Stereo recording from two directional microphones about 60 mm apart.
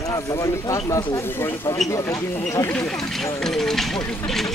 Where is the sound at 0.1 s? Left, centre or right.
Left.